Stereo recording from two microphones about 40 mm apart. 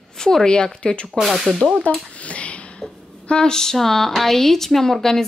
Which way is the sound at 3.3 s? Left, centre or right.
Centre.